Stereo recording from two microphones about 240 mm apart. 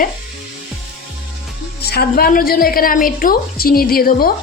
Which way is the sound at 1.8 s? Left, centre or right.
Left.